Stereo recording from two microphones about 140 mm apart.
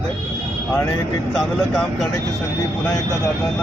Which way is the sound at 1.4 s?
Centre (ahead or behind).